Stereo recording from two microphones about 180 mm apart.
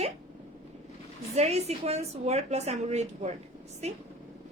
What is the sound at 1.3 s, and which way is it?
A woman's voice, 35° right (ahead or behind).